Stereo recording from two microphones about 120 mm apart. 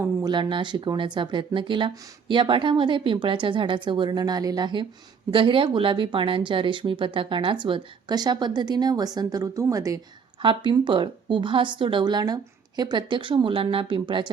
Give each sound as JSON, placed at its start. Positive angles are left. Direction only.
{"t": 0.3, "sound": "speech", "side_deg": -40}
{"t": 10.4, "sound": "speech", "side_deg": -40}